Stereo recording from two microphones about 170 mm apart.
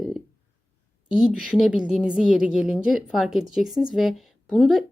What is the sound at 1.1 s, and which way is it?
A woman's voice, 5° right (ahead or behind).